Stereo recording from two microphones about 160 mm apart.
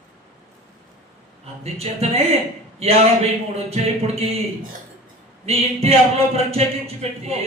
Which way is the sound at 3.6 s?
40° right (ahead or behind).